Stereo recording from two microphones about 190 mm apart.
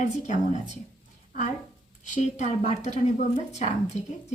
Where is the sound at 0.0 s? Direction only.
40° left (ahead or behind).